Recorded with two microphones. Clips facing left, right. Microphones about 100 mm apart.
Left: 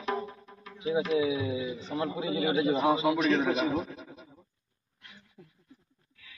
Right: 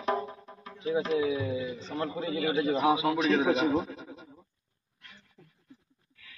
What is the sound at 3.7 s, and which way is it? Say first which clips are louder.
Speech: right 3 dB; 30° right (ahead or behind).